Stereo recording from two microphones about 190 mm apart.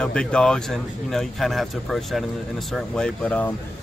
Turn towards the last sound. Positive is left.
turn(degrees=5)  # may be behind; listen again after turning